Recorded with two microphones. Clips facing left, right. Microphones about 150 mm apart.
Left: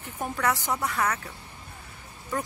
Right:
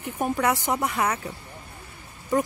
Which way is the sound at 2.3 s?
15° right (ahead or behind).